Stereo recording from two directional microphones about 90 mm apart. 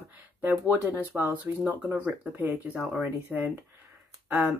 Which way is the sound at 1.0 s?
25° right (ahead or behind).